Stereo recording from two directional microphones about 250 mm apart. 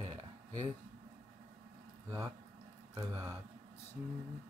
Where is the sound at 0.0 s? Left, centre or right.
Centre.